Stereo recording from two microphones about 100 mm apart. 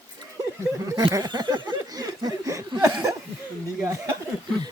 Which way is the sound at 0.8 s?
35° right (ahead or behind).